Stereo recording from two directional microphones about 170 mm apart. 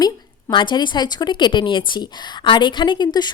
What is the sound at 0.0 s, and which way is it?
A woman's voice, 25° left (ahead or behind).